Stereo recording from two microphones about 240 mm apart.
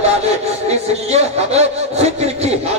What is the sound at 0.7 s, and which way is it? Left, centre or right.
Speech, right.